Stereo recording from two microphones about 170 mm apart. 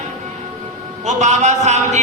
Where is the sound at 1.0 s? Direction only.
45° right (ahead or behind).